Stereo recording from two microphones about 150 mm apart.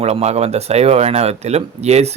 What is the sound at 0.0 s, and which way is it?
A man's voice, 45° right (ahead or behind).